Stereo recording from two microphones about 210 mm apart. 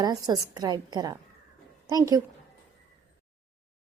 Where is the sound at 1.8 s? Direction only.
15° right (ahead or behind).